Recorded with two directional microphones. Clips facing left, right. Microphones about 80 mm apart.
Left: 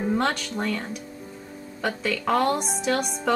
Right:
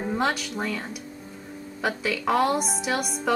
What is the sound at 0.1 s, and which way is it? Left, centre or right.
A woman's voice, centre.